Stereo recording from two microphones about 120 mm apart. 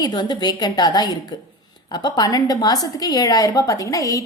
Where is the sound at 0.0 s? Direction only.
35° left (ahead or behind).